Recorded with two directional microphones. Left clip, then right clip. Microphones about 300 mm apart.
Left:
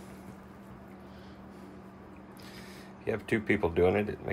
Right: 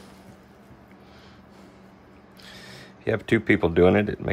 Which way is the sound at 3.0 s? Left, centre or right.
Right.